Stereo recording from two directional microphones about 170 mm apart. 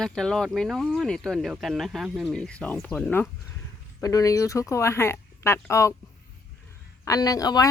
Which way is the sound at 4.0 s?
20° left (ahead or behind).